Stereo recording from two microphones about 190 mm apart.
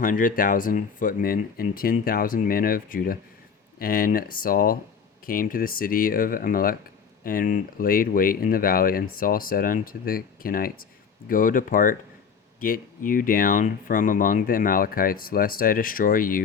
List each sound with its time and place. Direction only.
0.0 s speech: 45° left (ahead or behind)